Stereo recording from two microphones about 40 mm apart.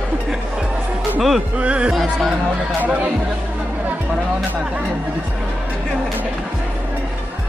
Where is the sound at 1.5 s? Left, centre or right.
Right.